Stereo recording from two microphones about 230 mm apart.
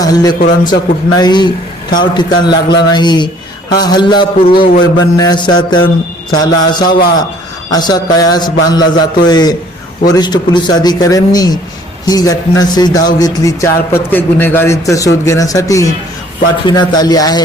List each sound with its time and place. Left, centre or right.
0.0 s a man's voice: centre